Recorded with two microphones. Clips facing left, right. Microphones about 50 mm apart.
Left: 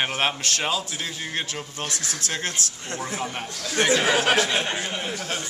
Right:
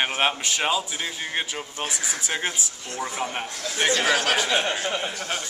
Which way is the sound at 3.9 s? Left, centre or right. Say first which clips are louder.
Left 1 dB; centre.